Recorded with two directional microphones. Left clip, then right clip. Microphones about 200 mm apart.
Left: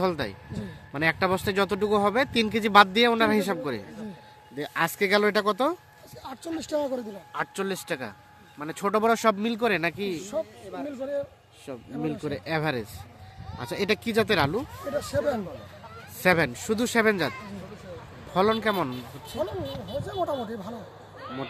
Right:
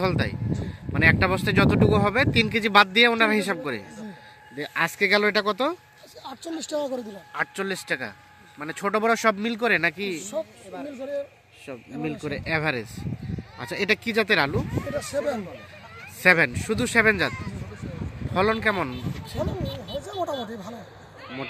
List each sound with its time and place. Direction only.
0.0 s speech: centre (ahead or behind)
6.2 s speech: 30° right (ahead or behind)
7.3 s speech: centre (ahead or behind)
10.7 s speech: 55° right (ahead or behind)
11.6 s speech: 5° right (ahead or behind)
18.3 s speech: centre (ahead or behind)